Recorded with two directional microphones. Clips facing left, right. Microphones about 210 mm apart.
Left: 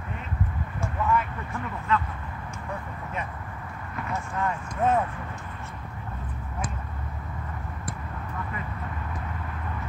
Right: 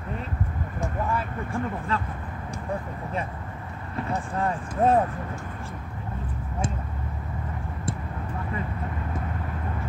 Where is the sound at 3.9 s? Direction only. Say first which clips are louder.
Right 3 dB; 30° right (ahead or behind).